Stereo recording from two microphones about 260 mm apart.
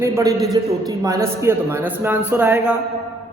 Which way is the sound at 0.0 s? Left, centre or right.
Centre.